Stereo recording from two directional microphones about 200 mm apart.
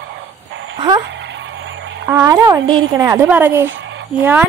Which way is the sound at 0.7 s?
20° right (ahead or behind).